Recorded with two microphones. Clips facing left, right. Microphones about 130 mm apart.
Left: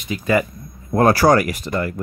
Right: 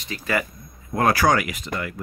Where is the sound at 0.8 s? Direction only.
35° left (ahead or behind).